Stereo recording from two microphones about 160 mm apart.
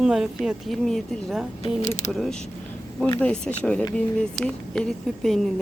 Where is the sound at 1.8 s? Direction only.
45° left (ahead or behind).